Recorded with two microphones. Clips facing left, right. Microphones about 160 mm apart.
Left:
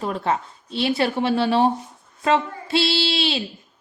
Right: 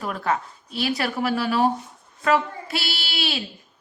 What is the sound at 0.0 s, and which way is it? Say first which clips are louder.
Speech: left 2 dB; 25° left (ahead or behind).